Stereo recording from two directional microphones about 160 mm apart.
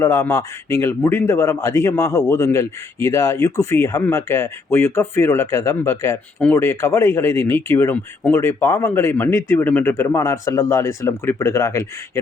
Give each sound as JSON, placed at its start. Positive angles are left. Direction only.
{"t": 0.0, "sound": "speech", "side_deg": 20}